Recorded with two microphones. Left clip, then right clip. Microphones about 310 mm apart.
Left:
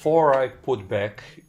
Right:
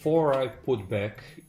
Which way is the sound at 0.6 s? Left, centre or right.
Left.